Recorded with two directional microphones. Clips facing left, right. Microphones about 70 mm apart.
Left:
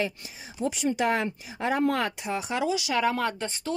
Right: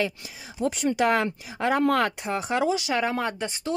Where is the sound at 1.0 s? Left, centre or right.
Right.